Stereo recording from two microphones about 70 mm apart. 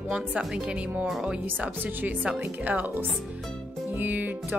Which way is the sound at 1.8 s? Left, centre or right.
Right.